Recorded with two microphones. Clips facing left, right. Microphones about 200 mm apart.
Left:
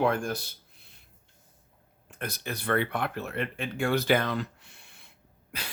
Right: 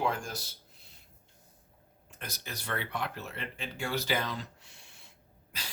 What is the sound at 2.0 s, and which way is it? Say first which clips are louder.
Speech: left 8 dB; 55° left (ahead or behind).